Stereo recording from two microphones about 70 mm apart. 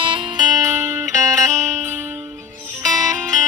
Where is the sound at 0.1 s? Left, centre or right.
Right.